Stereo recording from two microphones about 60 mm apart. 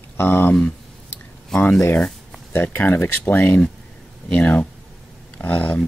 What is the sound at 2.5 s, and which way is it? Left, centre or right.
Speech, left.